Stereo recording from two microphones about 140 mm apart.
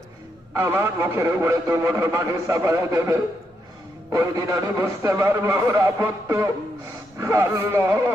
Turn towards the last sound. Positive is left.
turn(degrees=-15)  # may be behind; listen again after turning